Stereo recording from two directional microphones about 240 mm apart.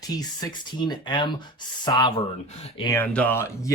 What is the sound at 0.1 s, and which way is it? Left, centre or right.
Speech, centre.